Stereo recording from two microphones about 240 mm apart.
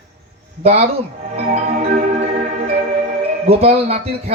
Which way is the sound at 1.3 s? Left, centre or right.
Right.